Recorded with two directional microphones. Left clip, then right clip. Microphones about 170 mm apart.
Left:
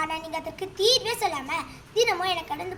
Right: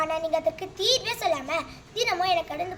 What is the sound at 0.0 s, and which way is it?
A child's voice, 25° right (ahead or behind).